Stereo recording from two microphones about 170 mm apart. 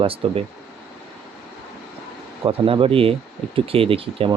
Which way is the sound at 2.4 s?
30° right (ahead or behind).